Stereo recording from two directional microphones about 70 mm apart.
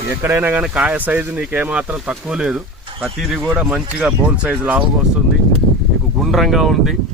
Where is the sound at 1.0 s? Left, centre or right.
Right; by 2.6 s centre.